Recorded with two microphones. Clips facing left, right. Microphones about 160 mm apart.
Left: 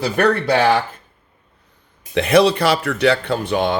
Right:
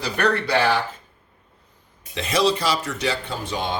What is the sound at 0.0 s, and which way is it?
Speech, 50° left (ahead or behind).